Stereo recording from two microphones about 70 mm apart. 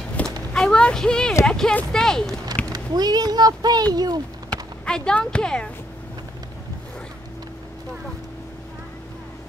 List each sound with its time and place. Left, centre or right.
0.2 s a sound: centre
1.9 s speech: centre
2.7 s speech: right
4.5 s speech: centre